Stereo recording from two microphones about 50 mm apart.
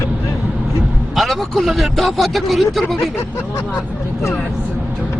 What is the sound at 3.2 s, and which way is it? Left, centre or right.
Speech, left.